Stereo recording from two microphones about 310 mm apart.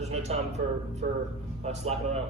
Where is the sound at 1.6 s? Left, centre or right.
Right.